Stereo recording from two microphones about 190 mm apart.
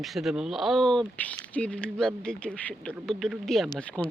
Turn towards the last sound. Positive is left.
turn(degrees=5)  # may be behind; listen again after turning